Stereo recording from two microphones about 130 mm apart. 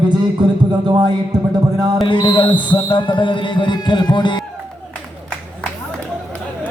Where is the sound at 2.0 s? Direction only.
35° left (ahead or behind).